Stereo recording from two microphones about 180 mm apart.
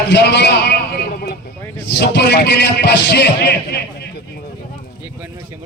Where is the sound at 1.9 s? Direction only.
70° left (ahead or behind).